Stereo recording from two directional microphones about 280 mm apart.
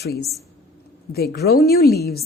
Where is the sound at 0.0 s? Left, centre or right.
Left.